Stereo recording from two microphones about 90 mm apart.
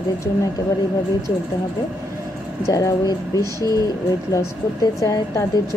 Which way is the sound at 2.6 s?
40° left (ahead or behind).